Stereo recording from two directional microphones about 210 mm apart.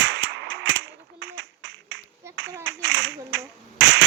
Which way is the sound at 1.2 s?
55° right (ahead or behind).